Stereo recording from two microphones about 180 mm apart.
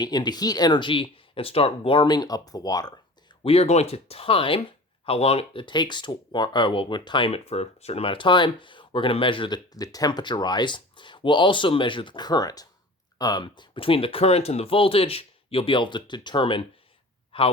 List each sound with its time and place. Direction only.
0.0 s speech: 25° left (ahead or behind)
3.4 s speech: 35° left (ahead or behind)